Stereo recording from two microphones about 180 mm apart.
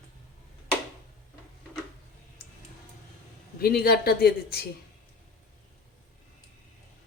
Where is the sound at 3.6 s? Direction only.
60° left (ahead or behind).